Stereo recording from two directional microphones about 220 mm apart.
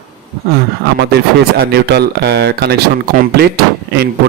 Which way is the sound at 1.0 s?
45° right (ahead or behind).